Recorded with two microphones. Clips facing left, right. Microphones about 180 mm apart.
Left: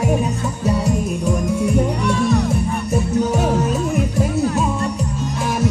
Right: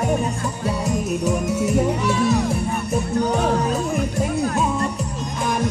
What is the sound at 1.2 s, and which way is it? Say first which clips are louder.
Music: left 3 dB; 5° right (ahead or behind).